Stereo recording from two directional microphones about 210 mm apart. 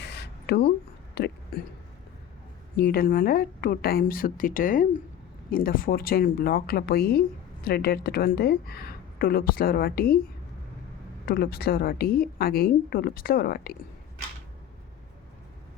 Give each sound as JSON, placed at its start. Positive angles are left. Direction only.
{"t": 0.0, "sound": "a sound", "side_deg": 50}
{"t": 1.2, "sound": "speech", "side_deg": 50}
{"t": 2.7, "sound": "speech", "side_deg": 45}
{"t": 11.3, "sound": "speech", "side_deg": 45}